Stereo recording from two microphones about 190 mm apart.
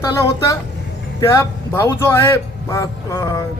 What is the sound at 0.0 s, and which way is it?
A man's voice, 15° left (ahead or behind).